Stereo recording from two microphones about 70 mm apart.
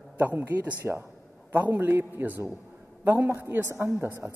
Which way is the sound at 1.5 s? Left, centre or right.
Right.